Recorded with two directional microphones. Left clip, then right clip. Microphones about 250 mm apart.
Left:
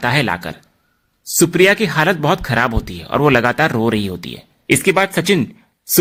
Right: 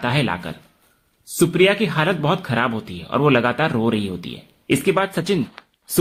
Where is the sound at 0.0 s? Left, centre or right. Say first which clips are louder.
Left 5 dB; left.